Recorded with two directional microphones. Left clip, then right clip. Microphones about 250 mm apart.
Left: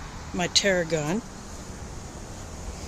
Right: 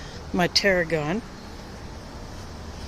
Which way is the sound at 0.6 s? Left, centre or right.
Centre.